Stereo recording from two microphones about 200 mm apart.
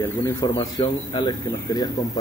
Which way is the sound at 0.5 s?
20° left (ahead or behind).